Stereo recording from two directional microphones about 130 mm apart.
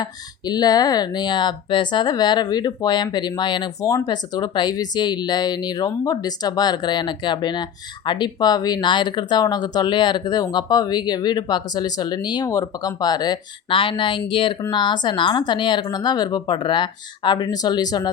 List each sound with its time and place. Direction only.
0.0 s speech: 30° left (ahead or behind)